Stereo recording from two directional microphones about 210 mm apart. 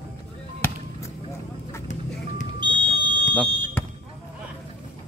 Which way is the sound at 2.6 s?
20° right (ahead or behind).